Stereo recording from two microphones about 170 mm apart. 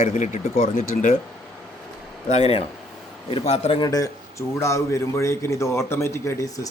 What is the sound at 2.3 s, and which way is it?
A man's voice, 40° left (ahead or behind).